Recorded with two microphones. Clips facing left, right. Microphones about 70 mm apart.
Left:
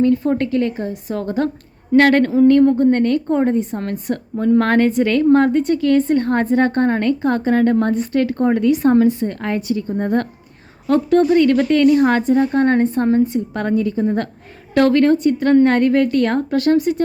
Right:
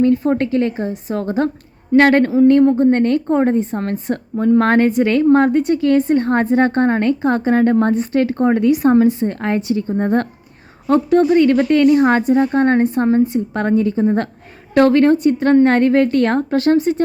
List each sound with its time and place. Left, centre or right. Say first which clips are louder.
0.0 s a woman's voice: right 1 dB; right
0.3 s a woman's voice: right 1 dB; right
2.0 s a sound: right 1 dB; centre
2.5 s a woman's voice: even; right
10.8 s a woman's voice: right 1 dB; centre